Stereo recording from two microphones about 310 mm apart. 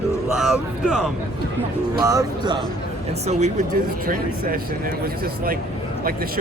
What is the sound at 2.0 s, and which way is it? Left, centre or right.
Speech, centre.